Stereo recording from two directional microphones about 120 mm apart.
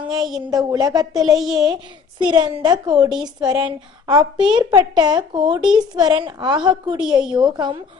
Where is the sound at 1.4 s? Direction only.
Centre (ahead or behind).